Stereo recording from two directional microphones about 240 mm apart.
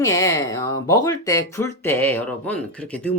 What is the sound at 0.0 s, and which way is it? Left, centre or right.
Speech, centre.